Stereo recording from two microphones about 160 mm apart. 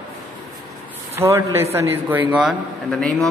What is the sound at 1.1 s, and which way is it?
A man's voice, 15° right (ahead or behind).